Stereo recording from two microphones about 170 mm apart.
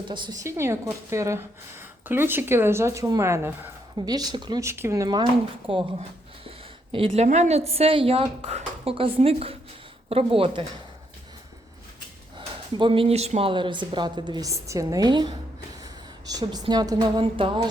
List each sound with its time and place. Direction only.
0.1 s speech: 25° right (ahead or behind)
0.4 s a woman's voice: 15° right (ahead or behind); by 10.7 s 30° right (ahead or behind)
12.4 s a woman's voice: 30° right (ahead or behind)